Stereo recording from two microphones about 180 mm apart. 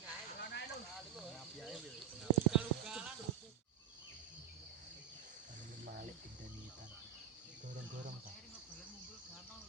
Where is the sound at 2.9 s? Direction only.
5° right (ahead or behind).